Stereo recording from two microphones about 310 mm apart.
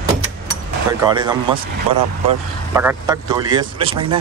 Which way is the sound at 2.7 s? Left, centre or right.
Centre.